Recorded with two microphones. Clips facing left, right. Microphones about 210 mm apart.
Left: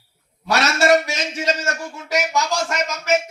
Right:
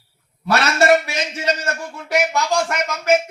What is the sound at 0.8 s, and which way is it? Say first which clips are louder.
A man's voice: right 1 dB; 60° right (ahead or behind).